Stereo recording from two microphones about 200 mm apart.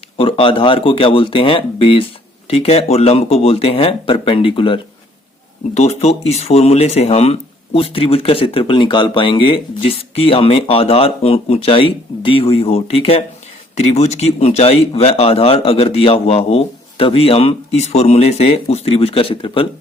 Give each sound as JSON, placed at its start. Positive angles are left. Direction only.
{"t": 0.2, "sound": "speech", "side_deg": 25}